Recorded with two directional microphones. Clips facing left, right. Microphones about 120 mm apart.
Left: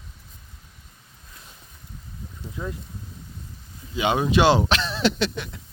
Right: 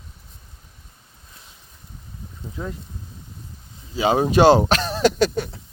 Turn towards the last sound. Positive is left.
turn(degrees=-40)  # may be behind; listen again after turning